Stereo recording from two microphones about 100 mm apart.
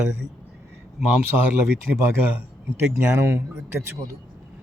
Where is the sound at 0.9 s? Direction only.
10° right (ahead or behind).